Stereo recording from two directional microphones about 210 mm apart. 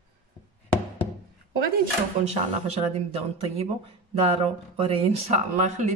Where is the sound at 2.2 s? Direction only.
35° right (ahead or behind).